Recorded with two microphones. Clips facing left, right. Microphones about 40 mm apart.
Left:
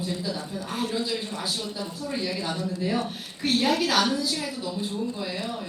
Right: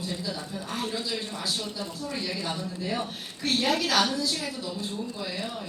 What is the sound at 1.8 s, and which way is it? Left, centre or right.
Speech, centre.